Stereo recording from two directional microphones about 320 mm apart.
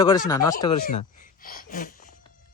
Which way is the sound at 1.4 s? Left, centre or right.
Left.